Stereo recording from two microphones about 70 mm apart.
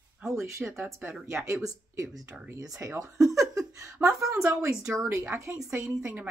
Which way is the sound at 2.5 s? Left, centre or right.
Right.